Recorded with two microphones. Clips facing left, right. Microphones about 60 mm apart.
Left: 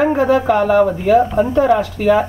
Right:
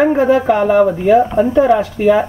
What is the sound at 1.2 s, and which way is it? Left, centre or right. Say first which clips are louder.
Speech: right 2 dB; centre.